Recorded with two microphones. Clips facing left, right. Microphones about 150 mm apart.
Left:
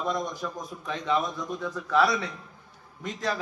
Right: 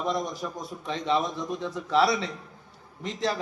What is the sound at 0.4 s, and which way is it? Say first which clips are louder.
A man's voice: right 1 dB; 30° right (ahead or behind).